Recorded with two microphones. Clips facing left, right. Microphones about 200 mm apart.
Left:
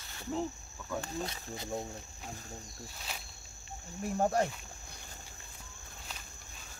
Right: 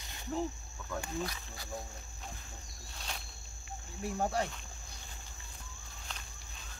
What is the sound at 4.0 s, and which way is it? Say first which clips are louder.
Speech: left 4 dB; 45° left (ahead or behind).